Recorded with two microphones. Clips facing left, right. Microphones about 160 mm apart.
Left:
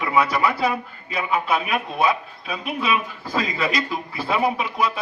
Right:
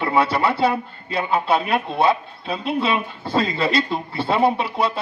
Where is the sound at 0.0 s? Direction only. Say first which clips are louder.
Right 1 dB; 30° right (ahead or behind).